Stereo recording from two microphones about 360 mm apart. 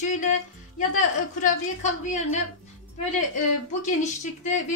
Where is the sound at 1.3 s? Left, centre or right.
Left.